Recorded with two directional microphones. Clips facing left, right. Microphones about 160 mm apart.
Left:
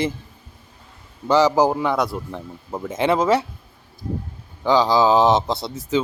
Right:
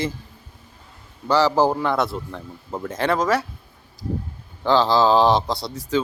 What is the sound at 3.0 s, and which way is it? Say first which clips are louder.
Speech: left 3 dB; 20° left (ahead or behind).